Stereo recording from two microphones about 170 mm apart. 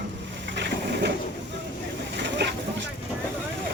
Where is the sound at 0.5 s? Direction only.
90° right.